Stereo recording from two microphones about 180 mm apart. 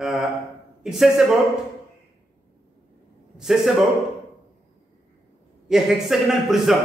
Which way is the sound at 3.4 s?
Centre (ahead or behind).